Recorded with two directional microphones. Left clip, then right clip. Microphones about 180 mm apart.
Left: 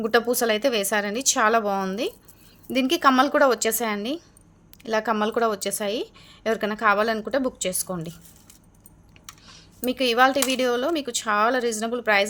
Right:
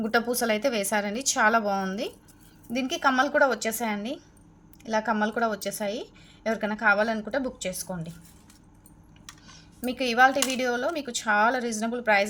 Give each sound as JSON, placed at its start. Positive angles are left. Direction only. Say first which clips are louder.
{"t": 0.0, "sound": "a woman's voice", "louder": "left 4 dB", "side_deg": 25}
{"t": 9.8, "sound": "a woman's voice", "louder": "left 2 dB", "side_deg": 30}